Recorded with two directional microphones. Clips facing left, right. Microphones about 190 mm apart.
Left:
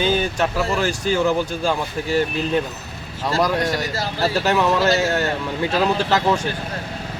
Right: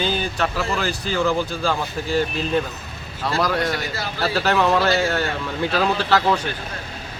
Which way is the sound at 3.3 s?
15° left (ahead or behind).